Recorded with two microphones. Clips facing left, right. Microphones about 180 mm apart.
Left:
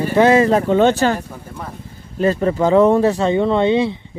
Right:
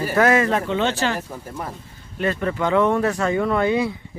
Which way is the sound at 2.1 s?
35° left (ahead or behind).